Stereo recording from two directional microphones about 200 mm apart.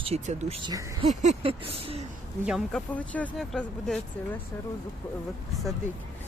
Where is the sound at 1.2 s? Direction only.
30° right (ahead or behind).